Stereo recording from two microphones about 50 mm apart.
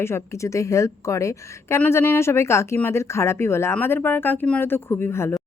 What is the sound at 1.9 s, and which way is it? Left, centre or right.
Speech, left.